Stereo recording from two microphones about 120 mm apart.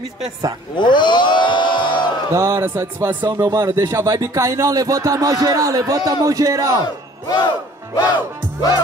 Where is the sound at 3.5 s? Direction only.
30° right (ahead or behind).